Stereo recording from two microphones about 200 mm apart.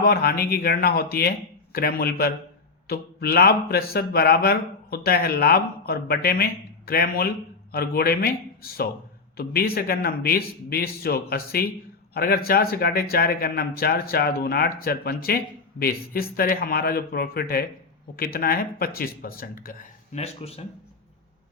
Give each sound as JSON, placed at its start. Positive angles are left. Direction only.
{"t": 0.0, "sound": "speech", "side_deg": 50}
{"t": 20.1, "sound": "speech", "side_deg": 30}